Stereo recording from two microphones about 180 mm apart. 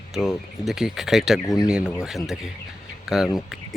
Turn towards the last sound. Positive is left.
turn(degrees=0)  # may be behind; listen again after turning